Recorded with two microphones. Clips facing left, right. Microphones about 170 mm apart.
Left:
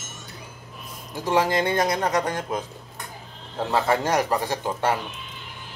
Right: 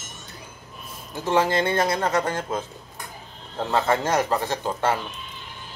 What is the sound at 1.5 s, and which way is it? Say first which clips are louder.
Speech: even; 15° left (ahead or behind).